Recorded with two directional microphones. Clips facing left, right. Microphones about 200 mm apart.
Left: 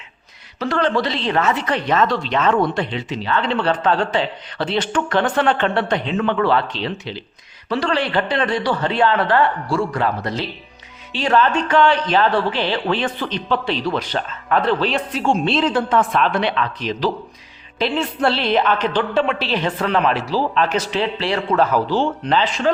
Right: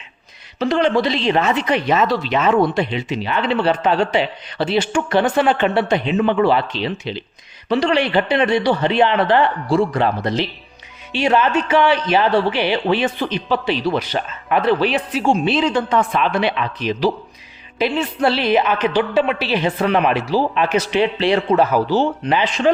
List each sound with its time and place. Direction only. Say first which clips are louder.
0.6 s speech: right 3 dB; 15° right (ahead or behind)